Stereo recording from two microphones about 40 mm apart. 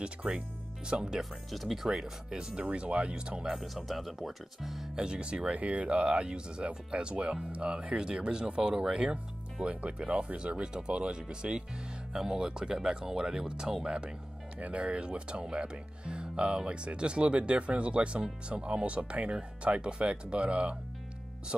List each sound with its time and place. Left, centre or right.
0.0 s speech: right
1.5 s speech: centre
1.9 s speech: centre
2.6 s speech: right
3.5 s speech: centre
4.9 s speech: right
12.1 s speech: centre